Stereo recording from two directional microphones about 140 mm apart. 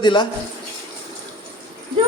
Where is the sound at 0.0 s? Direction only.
35° left (ahead or behind).